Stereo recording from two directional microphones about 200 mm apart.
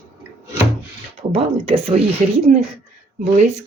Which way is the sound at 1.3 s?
30° right (ahead or behind).